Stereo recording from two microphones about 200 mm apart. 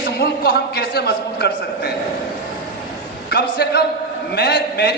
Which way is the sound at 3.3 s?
55° left (ahead or behind).